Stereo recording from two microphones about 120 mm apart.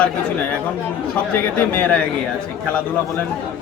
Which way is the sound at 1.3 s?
15° left (ahead or behind).